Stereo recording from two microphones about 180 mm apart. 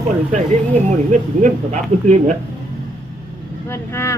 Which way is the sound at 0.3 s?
40° right (ahead or behind).